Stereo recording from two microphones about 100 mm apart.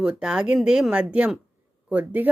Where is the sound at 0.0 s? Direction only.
10° right (ahead or behind).